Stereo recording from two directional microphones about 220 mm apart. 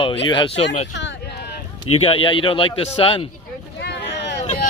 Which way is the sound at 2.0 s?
25° left (ahead or behind).